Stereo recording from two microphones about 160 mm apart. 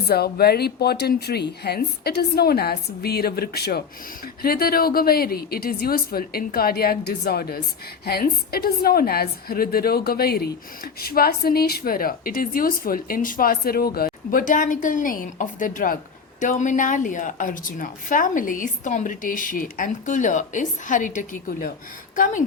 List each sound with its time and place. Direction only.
0.1 s speech: 80° left
4.4 s a woman's voice: 70° left (ahead or behind); by 22.4 s 55° left (ahead or behind)